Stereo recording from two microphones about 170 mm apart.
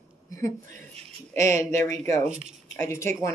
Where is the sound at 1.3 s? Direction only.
45° right (ahead or behind).